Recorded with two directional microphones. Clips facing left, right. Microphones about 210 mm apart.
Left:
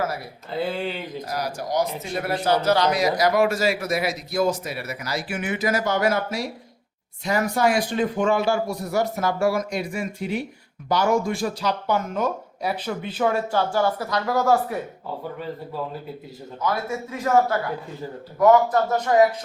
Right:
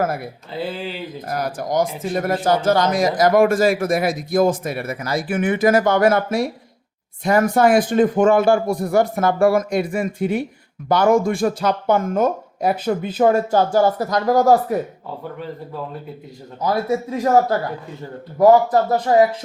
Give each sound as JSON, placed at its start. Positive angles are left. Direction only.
{"t": 0.5, "sound": "speech", "side_deg": 0}
{"t": 1.3, "sound": "speech", "side_deg": -50}
{"t": 16.6, "sound": "a man's voice", "side_deg": -35}